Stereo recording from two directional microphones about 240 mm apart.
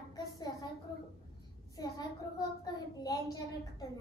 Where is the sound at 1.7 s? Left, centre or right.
Centre.